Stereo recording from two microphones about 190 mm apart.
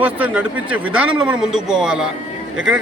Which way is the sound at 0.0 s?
10° right (ahead or behind).